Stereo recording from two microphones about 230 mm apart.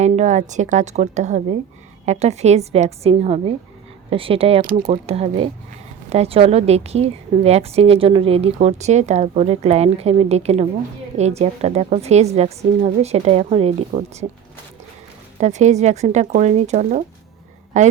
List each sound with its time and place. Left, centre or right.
0.0 s a woman's voice: right
4.6 s speech: right
5.0 s a woman's voice: right
15.4 s speech: right